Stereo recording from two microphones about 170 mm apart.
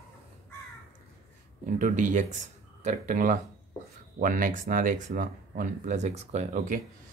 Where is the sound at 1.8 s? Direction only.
50° right (ahead or behind).